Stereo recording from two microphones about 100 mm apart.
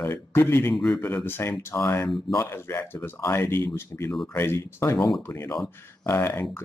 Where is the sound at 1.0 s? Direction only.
20° left (ahead or behind).